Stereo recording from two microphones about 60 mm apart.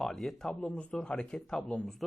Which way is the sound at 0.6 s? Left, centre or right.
Centre.